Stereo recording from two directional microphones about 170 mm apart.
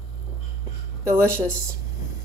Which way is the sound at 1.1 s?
15° right (ahead or behind).